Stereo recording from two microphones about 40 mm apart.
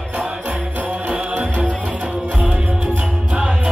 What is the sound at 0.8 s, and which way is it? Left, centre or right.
Music, right.